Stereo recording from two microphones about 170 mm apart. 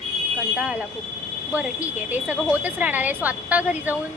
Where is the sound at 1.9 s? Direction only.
10° right (ahead or behind).